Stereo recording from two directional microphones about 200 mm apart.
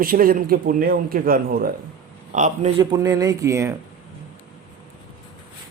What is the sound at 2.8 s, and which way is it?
Speech, 20° right (ahead or behind).